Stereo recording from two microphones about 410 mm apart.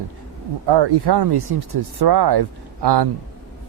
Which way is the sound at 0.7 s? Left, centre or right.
Right.